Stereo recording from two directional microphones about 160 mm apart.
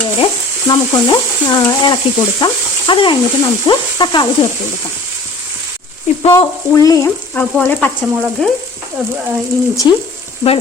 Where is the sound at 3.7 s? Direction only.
30° left (ahead or behind).